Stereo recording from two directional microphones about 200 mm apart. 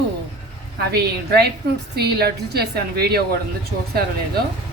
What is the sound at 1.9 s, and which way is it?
Speech, 50° right (ahead or behind).